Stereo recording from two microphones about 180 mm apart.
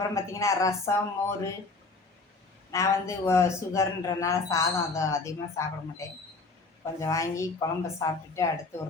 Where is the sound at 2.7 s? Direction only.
15° left (ahead or behind).